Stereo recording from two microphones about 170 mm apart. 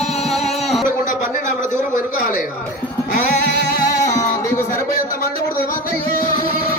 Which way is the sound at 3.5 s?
80° left.